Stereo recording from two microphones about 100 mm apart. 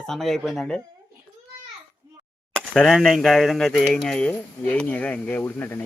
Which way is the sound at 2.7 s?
10° left (ahead or behind).